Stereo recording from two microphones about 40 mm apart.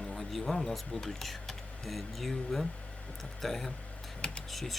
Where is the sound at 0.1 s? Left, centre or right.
Centre.